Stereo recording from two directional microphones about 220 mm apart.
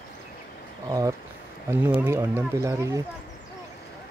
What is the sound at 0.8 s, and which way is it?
Speech, 15° right (ahead or behind).